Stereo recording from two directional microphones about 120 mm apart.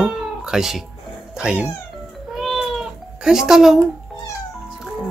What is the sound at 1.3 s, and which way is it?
Speech, 10° right (ahead or behind).